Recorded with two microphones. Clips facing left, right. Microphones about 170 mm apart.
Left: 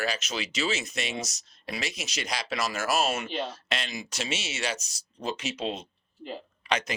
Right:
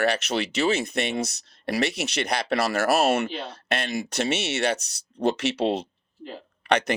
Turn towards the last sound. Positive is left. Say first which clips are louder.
# right 7 dB
turn(degrees=-65)  # may be behind; listen again after turning